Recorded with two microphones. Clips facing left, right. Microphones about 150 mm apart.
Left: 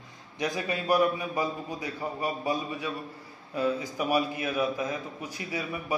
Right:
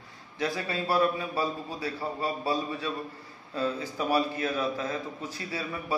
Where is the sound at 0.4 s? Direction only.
15° left (ahead or behind).